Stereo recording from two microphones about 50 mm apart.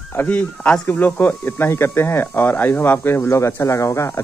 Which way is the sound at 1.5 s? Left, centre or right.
Left.